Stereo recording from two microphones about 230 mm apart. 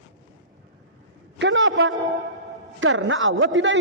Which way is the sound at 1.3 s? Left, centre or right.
Right.